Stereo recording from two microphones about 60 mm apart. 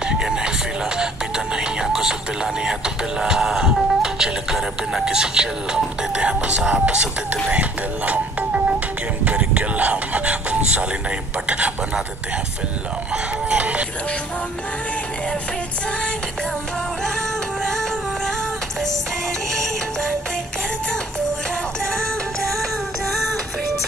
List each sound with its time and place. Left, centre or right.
0.0 s speech: centre
13.1 s speech: centre
17.6 s music: centre